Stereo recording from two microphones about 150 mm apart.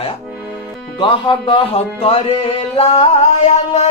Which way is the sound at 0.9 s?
30° left (ahead or behind).